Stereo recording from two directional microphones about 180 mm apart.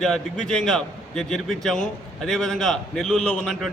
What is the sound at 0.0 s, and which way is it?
A man's voice, centre (ahead or behind).